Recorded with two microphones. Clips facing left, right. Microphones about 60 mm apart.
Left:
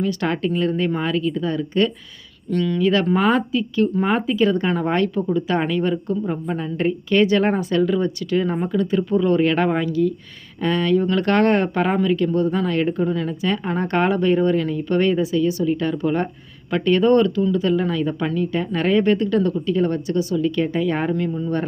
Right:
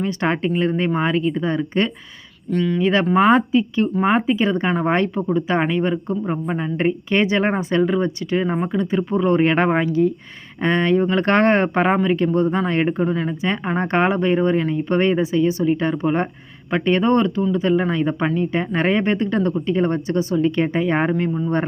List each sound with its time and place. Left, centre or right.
0.0 s speech: right
2.5 s speech: centre